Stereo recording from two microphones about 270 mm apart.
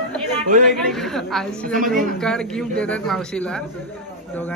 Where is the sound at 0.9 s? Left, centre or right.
Centre.